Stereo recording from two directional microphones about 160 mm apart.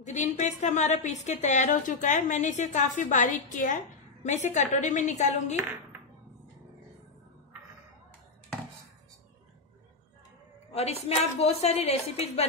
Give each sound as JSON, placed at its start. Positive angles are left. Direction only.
{"t": 0.0, "sound": "a woman's voice", "side_deg": 50}
{"t": 10.7, "sound": "a woman's voice", "side_deg": 40}